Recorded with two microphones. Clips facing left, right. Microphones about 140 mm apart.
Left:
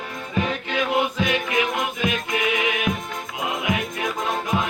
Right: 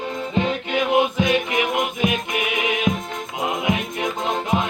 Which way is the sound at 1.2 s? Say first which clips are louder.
Right 2 dB; 20° right (ahead or behind).